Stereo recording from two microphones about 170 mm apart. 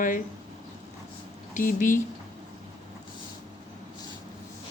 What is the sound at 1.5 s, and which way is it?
Speech, 50° left (ahead or behind).